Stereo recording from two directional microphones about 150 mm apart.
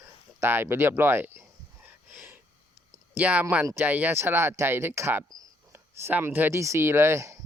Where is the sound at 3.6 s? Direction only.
10° right (ahead or behind).